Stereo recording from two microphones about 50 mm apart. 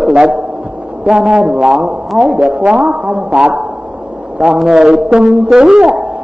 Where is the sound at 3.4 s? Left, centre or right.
Centre.